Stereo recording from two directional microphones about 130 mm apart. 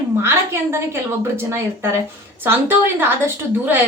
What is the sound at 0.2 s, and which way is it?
A woman's voice, 20° right (ahead or behind).